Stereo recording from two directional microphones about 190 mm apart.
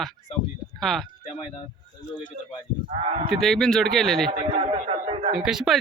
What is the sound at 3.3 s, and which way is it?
Speech, centre (ahead or behind).